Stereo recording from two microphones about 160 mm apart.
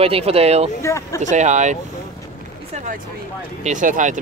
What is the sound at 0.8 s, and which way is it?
Speech, 20° left (ahead or behind).